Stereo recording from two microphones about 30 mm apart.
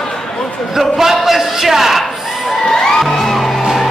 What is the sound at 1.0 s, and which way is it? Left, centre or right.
A man's voice, centre.